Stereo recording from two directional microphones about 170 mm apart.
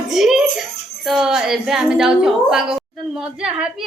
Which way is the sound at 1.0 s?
Centre (ahead or behind).